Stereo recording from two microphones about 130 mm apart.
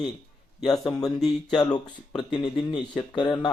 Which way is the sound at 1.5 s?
30° left (ahead or behind).